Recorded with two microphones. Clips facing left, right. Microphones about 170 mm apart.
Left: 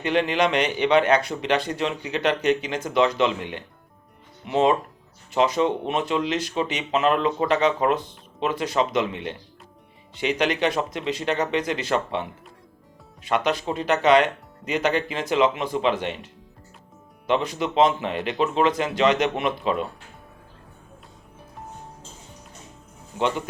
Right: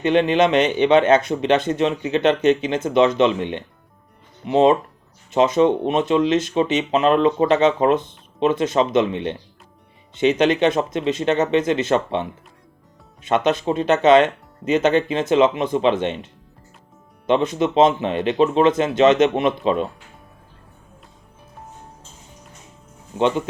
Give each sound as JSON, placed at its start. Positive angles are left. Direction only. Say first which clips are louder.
{"t": 0.0, "sound": "speech", "louder": "right 5 dB", "side_deg": -20}
{"t": 23.1, "sound": "speech", "louder": "right 5 dB", "side_deg": -25}